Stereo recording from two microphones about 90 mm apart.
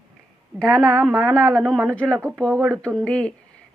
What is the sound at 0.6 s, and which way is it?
Speech, 40° right (ahead or behind).